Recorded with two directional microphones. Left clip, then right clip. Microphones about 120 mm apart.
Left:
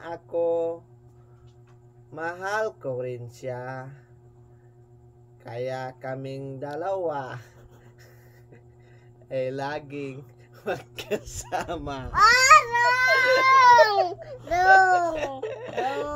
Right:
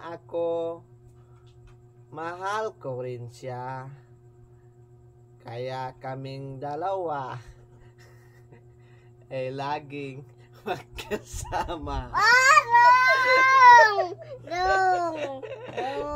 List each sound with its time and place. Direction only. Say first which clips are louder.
0.0 s a sound: left 3 dB; 15° right (ahead or behind)
2.1 s speech: left 2 dB; 15° right (ahead or behind)
5.4 s speech: left 2 dB; 15° right (ahead or behind)
9.3 s speech: left 2 dB; 15° right (ahead or behind)
10.6 s speech: left 2 dB; 35° right (ahead or behind)
13.1 s speech: left 1 dB; 5° right (ahead or behind)
14.5 s speech: left 6 dB; 10° left (ahead or behind)